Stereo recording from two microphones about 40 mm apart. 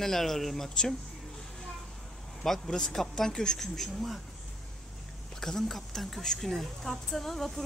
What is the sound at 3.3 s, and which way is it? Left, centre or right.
Speech, centre.